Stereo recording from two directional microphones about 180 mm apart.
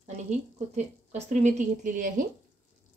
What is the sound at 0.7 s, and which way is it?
A woman's voice, 40° right (ahead or behind).